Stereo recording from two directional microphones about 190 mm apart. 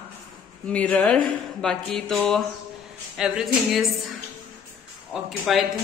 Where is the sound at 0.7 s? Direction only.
5° left (ahead or behind).